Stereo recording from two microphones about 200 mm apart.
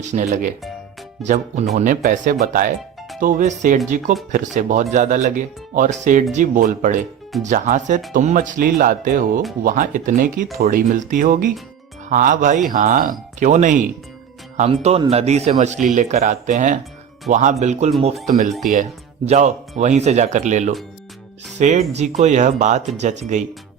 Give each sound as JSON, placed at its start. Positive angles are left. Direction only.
{"t": 0.0, "sound": "speech", "side_deg": -40}